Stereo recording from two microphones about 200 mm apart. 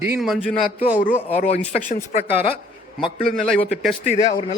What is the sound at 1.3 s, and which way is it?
Speech, 30° left (ahead or behind).